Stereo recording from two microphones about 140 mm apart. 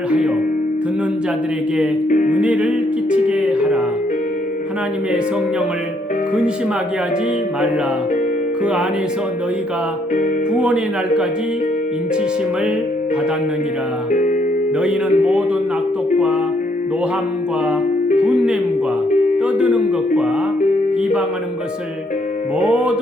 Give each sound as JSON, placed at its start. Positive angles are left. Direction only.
{"t": 2.0, "sound": "music", "side_deg": 65}
{"t": 2.3, "sound": "music", "side_deg": -10}
{"t": 10.5, "sound": "music", "side_deg": -5}
{"t": 14.1, "sound": "music", "side_deg": 70}
{"t": 14.8, "sound": "music", "side_deg": -5}
{"t": 18.1, "sound": "speech", "side_deg": -5}
{"t": 19.4, "sound": "music", "side_deg": -5}
{"t": 22.6, "sound": "music", "side_deg": -5}